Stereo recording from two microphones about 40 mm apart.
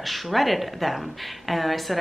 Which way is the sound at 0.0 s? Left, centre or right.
Centre.